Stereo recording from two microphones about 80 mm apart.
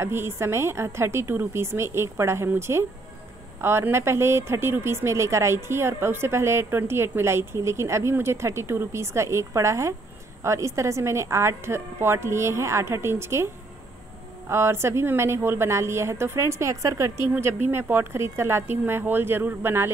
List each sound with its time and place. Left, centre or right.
0.0 s speech: right
14.5 s speech: right